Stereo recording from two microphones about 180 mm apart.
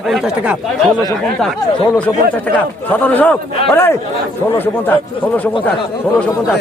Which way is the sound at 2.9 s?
10° left (ahead or behind).